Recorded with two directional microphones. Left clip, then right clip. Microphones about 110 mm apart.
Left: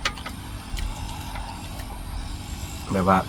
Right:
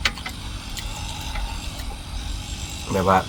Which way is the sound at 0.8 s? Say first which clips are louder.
Right 4 dB; 35° right (ahead or behind).